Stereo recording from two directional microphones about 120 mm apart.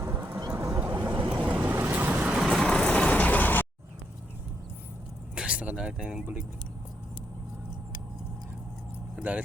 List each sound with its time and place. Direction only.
0.0 s vehicle: 20° right (ahead or behind); by 3.7 s 15° left (ahead or behind)
5.3 s speech: 10° right (ahead or behind)
9.1 s vehicle: 10° right (ahead or behind)